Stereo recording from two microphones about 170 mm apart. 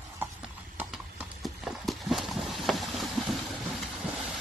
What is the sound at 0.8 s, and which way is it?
Clip-clop, 5° right (ahead or behind).